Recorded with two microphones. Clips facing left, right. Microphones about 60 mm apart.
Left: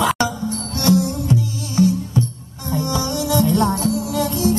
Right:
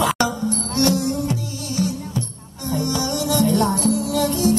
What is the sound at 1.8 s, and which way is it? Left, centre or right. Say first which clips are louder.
Music: left 7 dB; left.